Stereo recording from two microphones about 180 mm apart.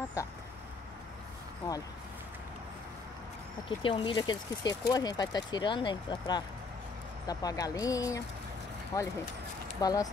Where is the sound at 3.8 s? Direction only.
30° left (ahead or behind).